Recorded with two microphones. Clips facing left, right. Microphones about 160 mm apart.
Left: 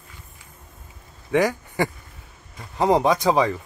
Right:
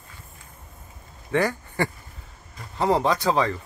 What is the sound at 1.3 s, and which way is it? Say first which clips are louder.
Speech: left 3 dB; 15° left (ahead or behind).